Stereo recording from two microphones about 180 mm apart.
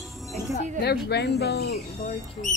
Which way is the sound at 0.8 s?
65° left (ahead or behind).